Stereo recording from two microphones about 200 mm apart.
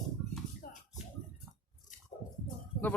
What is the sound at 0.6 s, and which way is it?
Shuffle, 45° left (ahead or behind).